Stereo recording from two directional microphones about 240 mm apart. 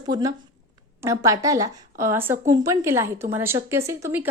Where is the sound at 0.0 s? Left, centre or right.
Centre.